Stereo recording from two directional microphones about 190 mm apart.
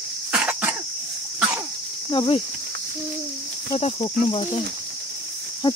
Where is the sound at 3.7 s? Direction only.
25° left (ahead or behind).